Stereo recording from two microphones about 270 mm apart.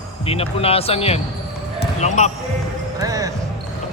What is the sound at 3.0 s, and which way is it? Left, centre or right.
Basketball bounce, centre.